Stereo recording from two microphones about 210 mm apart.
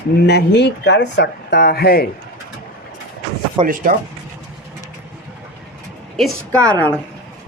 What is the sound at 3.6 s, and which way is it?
Speech, 40° right (ahead or behind).